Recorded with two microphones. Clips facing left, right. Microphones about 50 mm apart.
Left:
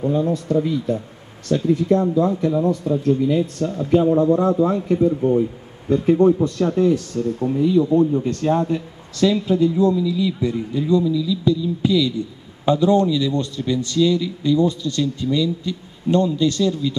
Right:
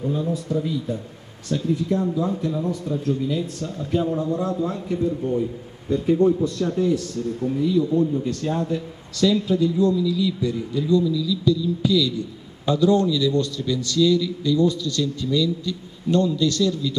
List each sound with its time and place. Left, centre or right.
0.0 s a man's voice: left
0.5 s a man's voice: left